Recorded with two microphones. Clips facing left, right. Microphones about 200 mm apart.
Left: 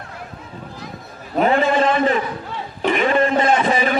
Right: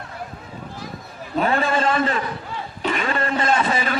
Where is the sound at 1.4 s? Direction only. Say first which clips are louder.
Left 4 dB; 20° left (ahead or behind).